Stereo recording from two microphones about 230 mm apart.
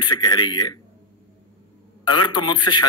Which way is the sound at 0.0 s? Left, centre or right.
Centre.